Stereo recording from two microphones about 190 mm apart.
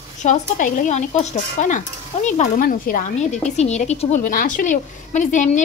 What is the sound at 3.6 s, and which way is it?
A woman's voice, 35° left (ahead or behind).